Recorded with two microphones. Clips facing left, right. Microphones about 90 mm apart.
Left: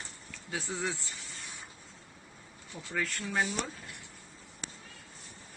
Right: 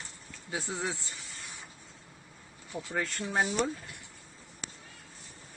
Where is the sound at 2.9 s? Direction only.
25° right (ahead or behind).